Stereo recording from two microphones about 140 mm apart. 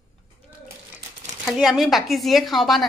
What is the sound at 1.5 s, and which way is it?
A woman's voice, 5° right (ahead or behind).